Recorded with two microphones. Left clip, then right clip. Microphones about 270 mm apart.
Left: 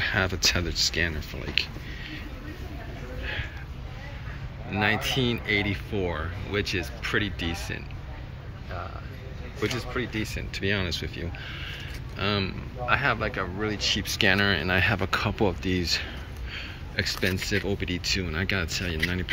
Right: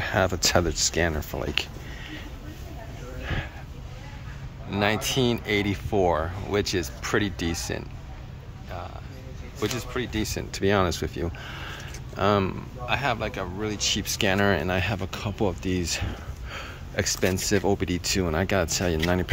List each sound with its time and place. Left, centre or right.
0.0 s a sound: centre
0.5 s speech: centre
4.6 s speech: centre
9.6 s speech: centre
12.9 s speech: centre